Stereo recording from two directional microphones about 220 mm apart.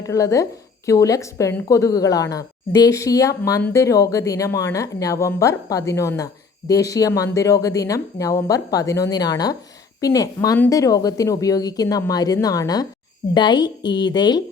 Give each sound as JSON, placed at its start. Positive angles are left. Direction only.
{"t": 0.0, "sound": "a woman's voice", "side_deg": 15}